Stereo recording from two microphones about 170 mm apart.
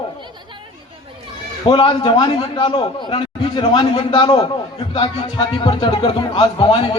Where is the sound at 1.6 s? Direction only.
30° left (ahead or behind).